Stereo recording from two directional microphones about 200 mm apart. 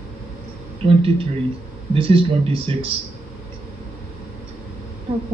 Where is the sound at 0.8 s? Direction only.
30° right (ahead or behind).